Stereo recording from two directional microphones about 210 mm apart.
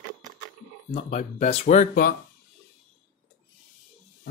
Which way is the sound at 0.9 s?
30° left (ahead or behind).